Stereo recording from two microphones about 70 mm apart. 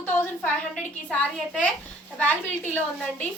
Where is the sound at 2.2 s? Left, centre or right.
Left.